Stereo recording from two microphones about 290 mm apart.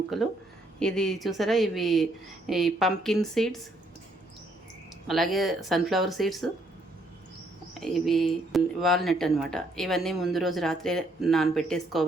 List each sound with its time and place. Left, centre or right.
0.1 s speech: centre
5.0 s speech: centre
7.7 s speech: centre